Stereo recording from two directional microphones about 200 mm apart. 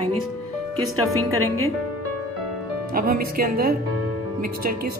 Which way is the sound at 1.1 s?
90° right.